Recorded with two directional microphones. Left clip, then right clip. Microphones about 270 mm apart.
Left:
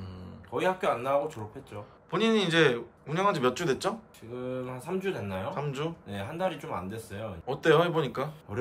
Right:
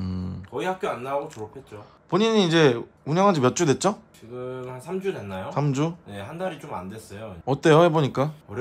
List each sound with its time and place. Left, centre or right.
0.0 s a sound: right
0.6 s speech: centre
2.0 s speech: centre
4.4 s speech: centre
5.5 s speech: right
6.0 s speech: centre
7.4 s speech: right